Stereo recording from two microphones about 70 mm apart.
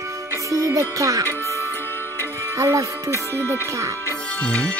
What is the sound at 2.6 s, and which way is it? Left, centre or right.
Speech, right.